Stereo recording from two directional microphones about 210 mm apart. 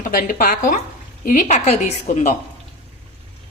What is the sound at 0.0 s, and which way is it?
A woman's voice, 40° left (ahead or behind).